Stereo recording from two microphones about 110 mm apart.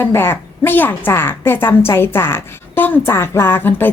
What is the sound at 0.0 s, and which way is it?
A woman's voice, 20° left (ahead or behind).